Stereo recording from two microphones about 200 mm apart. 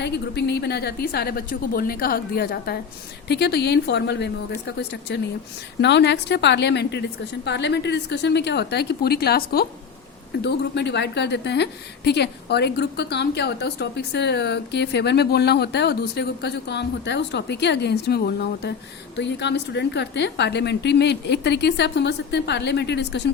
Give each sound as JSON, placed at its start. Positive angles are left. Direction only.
{"t": 0.0, "sound": "a woman's voice", "side_deg": 55}